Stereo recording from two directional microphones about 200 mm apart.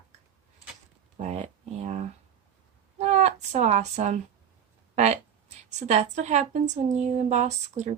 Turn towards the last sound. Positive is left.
turn(degrees=-35)  # may be behind; listen again after turning